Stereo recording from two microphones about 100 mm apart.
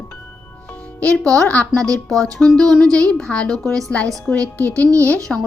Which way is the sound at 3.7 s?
5° left (ahead or behind).